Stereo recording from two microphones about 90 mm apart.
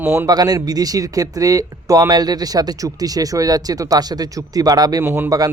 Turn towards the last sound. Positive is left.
turn(degrees=-45)  # may be behind; listen again after turning